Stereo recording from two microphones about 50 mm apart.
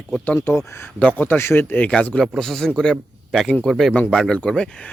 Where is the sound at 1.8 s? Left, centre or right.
Left.